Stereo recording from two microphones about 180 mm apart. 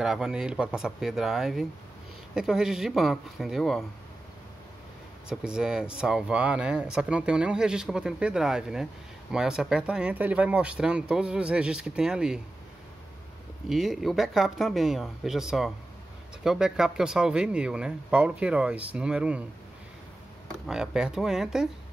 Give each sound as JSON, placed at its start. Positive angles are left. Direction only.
{"t": 0.0, "sound": "speech", "side_deg": -5}
{"t": 5.3, "sound": "speech", "side_deg": -5}
{"t": 13.7, "sound": "speech", "side_deg": 0}
{"t": 20.6, "sound": "speech", "side_deg": -5}